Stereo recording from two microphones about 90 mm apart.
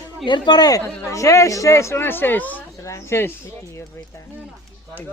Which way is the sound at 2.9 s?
30° left (ahead or behind).